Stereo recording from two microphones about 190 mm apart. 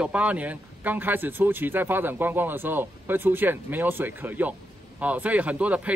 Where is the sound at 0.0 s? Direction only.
5° right (ahead or behind).